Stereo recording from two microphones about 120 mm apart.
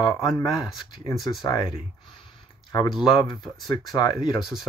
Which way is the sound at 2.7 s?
35° left (ahead or behind).